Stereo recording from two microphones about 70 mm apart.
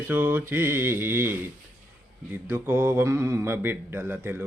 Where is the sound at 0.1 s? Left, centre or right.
Right.